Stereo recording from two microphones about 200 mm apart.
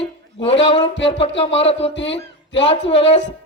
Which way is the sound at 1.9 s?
65° left (ahead or behind).